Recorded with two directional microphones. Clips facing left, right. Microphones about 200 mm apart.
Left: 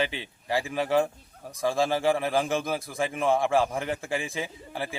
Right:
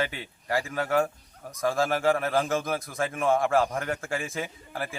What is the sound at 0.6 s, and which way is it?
Speech, 15° left (ahead or behind).